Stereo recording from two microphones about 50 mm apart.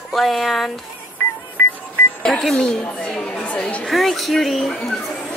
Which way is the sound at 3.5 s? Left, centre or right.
Left.